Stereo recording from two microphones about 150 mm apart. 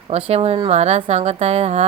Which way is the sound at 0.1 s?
45° right (ahead or behind).